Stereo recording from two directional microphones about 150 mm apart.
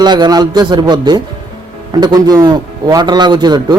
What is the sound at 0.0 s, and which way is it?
A man's voice, 30° right (ahead or behind).